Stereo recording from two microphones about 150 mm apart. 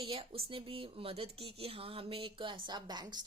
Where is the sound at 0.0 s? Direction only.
40° right (ahead or behind).